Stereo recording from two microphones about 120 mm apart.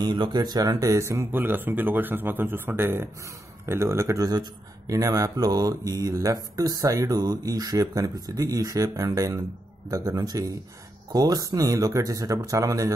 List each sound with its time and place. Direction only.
0.0 s a man's voice: 35° right (ahead or behind)